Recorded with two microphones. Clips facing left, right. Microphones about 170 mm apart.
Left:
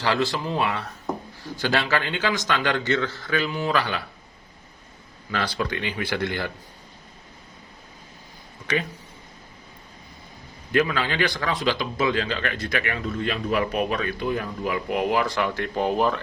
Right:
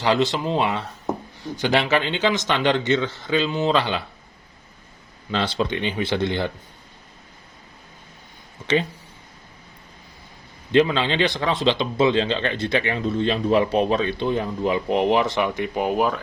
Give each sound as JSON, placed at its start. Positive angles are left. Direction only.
{"t": 0.0, "sound": "speech", "side_deg": -20}
{"t": 5.3, "sound": "speech", "side_deg": -25}
{"t": 8.6, "sound": "speech", "side_deg": -25}
{"t": 10.7, "sound": "speech", "side_deg": -25}